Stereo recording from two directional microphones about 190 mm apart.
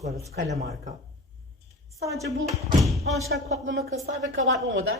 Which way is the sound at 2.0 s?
15° right (ahead or behind).